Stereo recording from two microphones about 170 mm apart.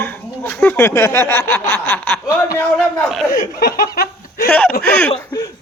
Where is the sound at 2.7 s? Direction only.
5° left (ahead or behind).